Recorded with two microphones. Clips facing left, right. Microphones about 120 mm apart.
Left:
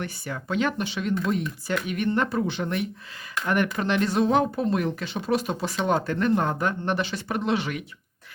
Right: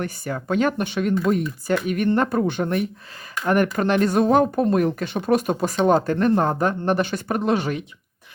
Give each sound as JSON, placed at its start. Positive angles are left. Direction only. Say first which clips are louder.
{"t": 0.0, "sound": "speech", "louder": "right 5 dB", "side_deg": -45}